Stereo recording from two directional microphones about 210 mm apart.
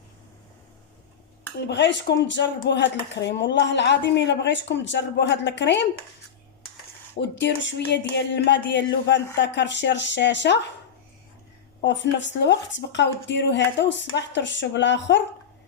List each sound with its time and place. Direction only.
1.6 s speech: 55° left (ahead or behind)
7.2 s speech: 60° left (ahead or behind)
11.8 s speech: 60° left (ahead or behind)